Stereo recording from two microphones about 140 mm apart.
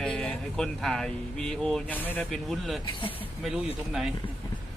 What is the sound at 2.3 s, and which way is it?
Speech, centre (ahead or behind).